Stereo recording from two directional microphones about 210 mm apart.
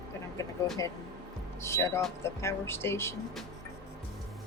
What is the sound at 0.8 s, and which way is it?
Speech, 15° left (ahead or behind).